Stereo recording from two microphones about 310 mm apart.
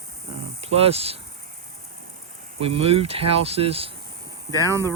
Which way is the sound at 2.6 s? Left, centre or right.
Centre.